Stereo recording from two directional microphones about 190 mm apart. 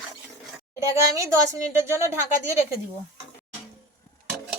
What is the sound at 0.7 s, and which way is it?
Speech, 15° right (ahead or behind).